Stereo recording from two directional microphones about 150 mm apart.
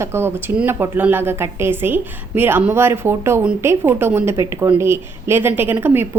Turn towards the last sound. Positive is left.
turn(degrees=-15)  # may be behind; listen again after turning